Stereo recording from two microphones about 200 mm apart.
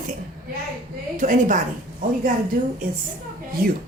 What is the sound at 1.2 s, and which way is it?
Speech, 40° right (ahead or behind).